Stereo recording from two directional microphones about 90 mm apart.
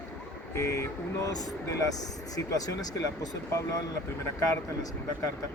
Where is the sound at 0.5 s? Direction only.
35° left (ahead or behind).